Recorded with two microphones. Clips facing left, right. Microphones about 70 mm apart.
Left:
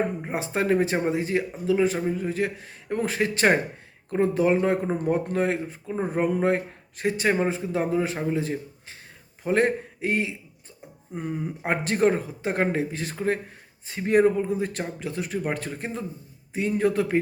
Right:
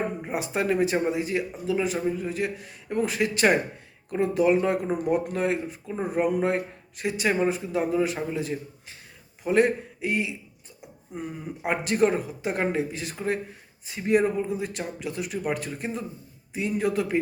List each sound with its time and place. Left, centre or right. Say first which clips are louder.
0.3 s a man's voice: left 1 dB; left